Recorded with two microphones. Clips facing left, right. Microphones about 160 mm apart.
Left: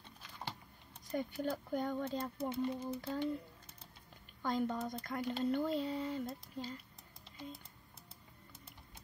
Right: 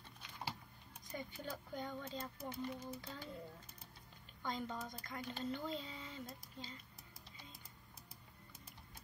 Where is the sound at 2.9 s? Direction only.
65° left (ahead or behind).